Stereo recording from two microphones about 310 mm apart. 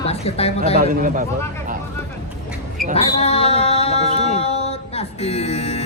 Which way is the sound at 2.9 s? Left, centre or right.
Centre.